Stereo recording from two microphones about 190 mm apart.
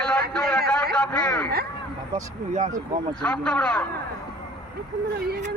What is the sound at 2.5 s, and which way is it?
Speech, 40° right (ahead or behind).